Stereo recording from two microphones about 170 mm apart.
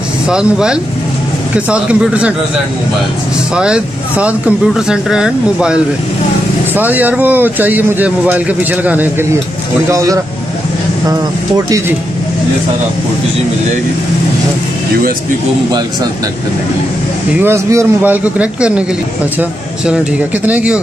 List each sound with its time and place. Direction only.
0.3 s speech: 5° right (ahead or behind)
3.5 s speech: 5° right (ahead or behind); by 11.8 s 20° right (ahead or behind)
17.4 s speech: 15° right (ahead or behind)
20.4 s speech: 10° right (ahead or behind)